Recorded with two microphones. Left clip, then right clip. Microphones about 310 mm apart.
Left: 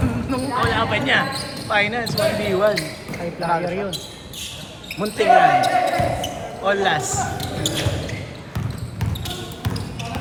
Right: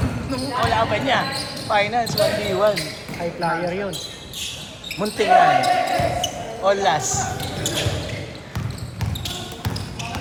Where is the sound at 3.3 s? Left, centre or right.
Right.